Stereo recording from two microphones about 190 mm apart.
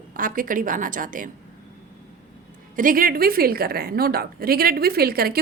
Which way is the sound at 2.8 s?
45° right (ahead or behind).